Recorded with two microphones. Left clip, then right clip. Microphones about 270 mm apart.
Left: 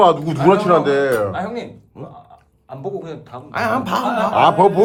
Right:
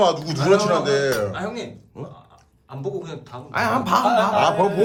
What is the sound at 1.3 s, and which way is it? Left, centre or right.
Speech, centre.